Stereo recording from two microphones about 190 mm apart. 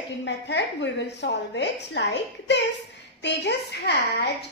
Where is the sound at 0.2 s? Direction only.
65° left (ahead or behind).